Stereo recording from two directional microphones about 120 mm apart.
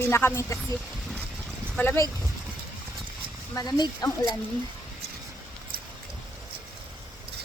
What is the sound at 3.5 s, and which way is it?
Speech, 30° left (ahead or behind).